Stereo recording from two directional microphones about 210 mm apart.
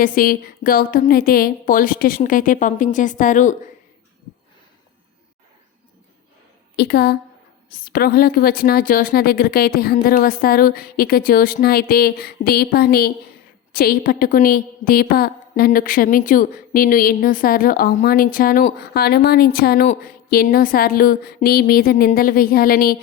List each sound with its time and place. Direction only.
0.0 s a woman's voice: 40° left (ahead or behind)
6.7 s a woman's voice: 50° left (ahead or behind)